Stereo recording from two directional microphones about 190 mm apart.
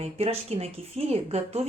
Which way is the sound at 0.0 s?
30° right (ahead or behind).